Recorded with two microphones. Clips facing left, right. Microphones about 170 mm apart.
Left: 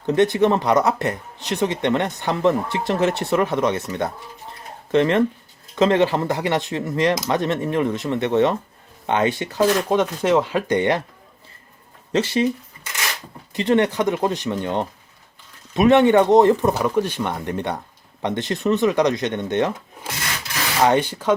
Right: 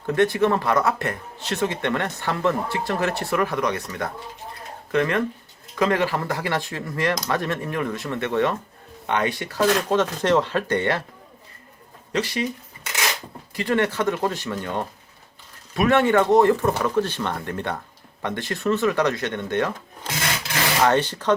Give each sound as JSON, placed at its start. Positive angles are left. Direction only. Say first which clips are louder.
{"t": 0.0, "sound": "speech", "louder": "left 3 dB", "side_deg": 20}
{"t": 12.1, "sound": "speech", "louder": "left 5 dB", "side_deg": 25}
{"t": 13.5, "sound": "speech", "louder": "left 4 dB", "side_deg": 20}
{"t": 20.8, "sound": "speech", "louder": "left 3 dB", "side_deg": 15}